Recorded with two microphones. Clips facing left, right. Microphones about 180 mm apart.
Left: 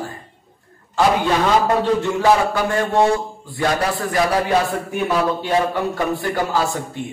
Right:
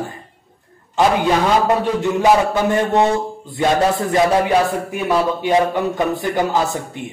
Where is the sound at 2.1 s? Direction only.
20° right (ahead or behind).